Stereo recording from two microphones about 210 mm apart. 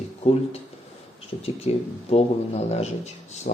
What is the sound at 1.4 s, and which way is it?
Speech, 30° left (ahead or behind).